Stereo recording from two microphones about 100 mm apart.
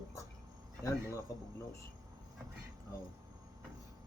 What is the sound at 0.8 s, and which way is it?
Speech, 30° left (ahead or behind).